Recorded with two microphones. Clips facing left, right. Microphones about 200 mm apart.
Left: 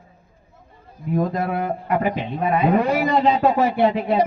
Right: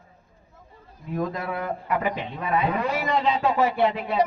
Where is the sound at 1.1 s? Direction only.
50° left (ahead or behind).